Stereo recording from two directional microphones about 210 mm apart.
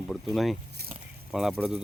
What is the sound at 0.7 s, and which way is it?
Speech, 45° right (ahead or behind).